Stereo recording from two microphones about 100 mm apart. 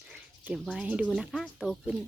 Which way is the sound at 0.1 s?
10° right (ahead or behind).